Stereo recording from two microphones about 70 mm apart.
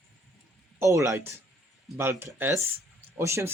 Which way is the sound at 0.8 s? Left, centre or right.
Right.